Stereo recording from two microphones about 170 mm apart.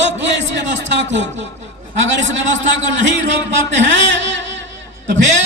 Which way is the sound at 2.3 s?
90° right.